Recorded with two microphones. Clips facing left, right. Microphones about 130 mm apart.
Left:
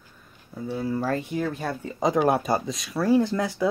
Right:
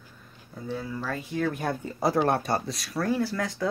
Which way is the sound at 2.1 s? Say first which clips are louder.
Left 4 dB; 5° left (ahead or behind).